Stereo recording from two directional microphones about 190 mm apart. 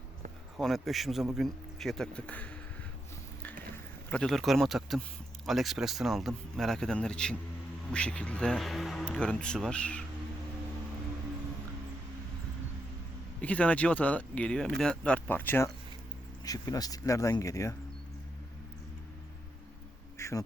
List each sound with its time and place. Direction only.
0.5 s speech: centre (ahead or behind)
4.1 s speech: 5° left (ahead or behind)
13.4 s speech: 5° left (ahead or behind)
20.1 s insect: 15° left (ahead or behind)